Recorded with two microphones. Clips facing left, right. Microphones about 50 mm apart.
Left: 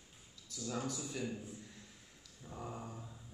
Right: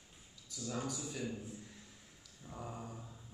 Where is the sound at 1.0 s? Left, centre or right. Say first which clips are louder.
Left 1 dB; centre.